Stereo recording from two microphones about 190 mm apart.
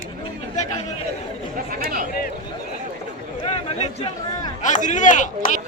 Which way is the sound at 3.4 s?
30° left (ahead or behind).